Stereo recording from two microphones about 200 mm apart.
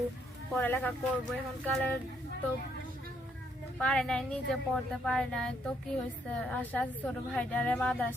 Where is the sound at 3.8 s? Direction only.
5° left (ahead or behind).